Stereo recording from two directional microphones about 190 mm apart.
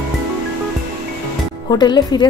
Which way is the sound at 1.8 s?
20° left (ahead or behind).